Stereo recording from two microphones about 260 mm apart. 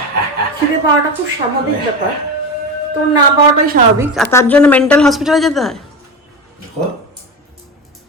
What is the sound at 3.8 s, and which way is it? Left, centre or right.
Speech, right.